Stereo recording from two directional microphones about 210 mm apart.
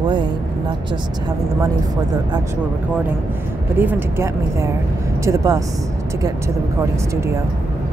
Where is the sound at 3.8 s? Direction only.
10° right (ahead or behind).